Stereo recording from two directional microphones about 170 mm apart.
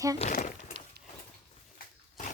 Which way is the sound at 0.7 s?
40° right (ahead or behind).